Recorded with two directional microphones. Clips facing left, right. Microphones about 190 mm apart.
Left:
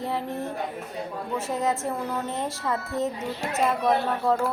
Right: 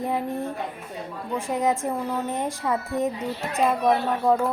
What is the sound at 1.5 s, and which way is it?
A woman's voice, 15° right (ahead or behind).